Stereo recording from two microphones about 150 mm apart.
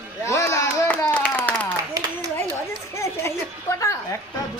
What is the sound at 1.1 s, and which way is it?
Clapping, 10° left (ahead or behind).